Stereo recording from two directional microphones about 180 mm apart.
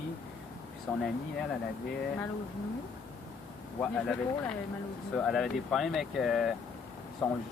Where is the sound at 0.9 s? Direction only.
10° left (ahead or behind).